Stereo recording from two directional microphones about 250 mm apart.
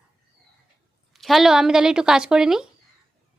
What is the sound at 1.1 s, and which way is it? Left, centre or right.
A woman's voice, centre.